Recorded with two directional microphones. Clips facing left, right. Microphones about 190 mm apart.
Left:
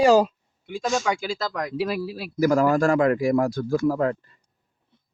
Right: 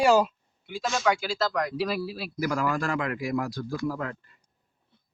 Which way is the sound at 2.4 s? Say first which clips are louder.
Left 9 dB; 40° left (ahead or behind).